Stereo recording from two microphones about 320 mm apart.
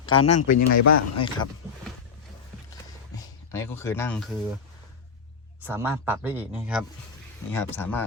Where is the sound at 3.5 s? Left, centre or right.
Centre.